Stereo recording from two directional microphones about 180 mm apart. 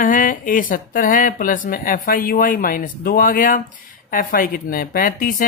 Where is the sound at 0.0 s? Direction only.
50° left (ahead or behind).